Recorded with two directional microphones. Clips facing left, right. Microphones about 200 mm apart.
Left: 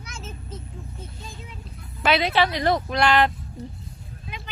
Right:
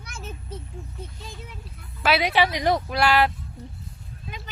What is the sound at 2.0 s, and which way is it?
A woman's voice, 10° right (ahead or behind).